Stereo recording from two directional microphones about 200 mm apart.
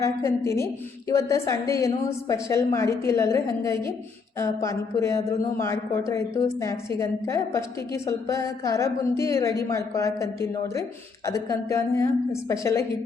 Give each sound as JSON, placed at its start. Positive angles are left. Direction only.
{"t": 0.0, "sound": "a woman's voice", "side_deg": 15}